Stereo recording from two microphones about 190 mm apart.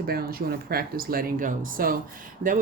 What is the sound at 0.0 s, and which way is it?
Speech, 50° right (ahead or behind).